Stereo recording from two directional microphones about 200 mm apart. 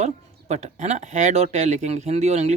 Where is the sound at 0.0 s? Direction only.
35° right (ahead or behind).